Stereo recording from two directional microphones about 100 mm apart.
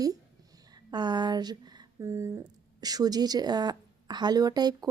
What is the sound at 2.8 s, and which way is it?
A woman's voice, 40° right (ahead or behind).